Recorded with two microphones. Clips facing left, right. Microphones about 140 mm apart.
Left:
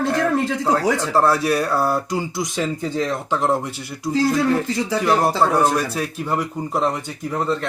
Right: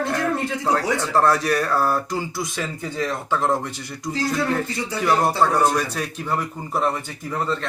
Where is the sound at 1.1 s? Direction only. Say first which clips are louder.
Even; 5° left (ahead or behind).